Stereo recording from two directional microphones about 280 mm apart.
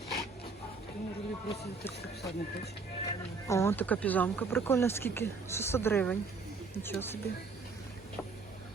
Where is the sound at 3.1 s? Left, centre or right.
Centre.